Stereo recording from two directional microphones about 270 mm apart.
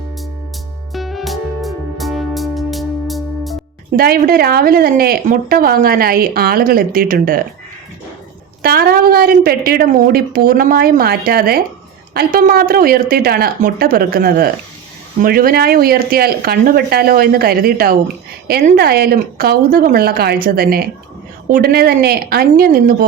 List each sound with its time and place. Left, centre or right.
0.9 s music: centre
3.9 s speech: right
8.6 s speech: right